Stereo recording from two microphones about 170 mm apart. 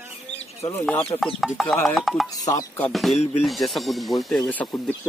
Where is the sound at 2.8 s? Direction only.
Centre (ahead or behind).